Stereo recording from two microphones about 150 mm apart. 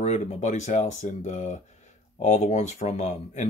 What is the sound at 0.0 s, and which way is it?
Speech, 50° left (ahead or behind).